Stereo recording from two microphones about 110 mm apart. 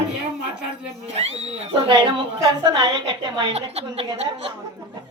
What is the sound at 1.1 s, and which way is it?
Speech, 70° right (ahead or behind).